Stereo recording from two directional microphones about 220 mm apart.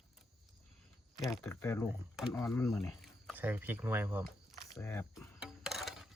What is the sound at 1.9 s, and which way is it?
Speech, centre (ahead or behind).